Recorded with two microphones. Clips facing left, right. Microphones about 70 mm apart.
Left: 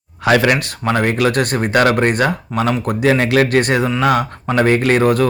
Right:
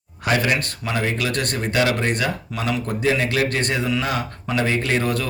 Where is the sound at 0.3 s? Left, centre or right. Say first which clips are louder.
Left 7 dB; left.